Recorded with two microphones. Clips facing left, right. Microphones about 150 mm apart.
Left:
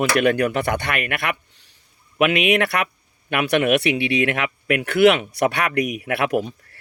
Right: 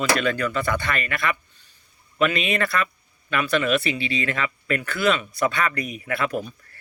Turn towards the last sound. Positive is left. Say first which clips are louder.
# left 6 dB
turn(degrees=75)  # may be behind; listen again after turning